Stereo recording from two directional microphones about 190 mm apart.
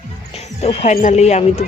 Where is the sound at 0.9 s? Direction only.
40° left (ahead or behind).